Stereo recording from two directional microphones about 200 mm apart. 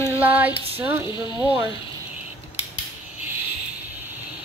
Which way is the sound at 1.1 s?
20° left (ahead or behind).